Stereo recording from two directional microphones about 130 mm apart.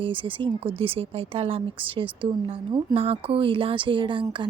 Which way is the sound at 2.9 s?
45° right (ahead or behind).